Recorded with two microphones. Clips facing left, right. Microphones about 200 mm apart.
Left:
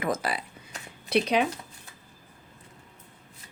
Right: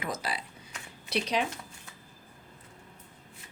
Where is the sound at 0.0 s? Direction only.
55° left (ahead or behind).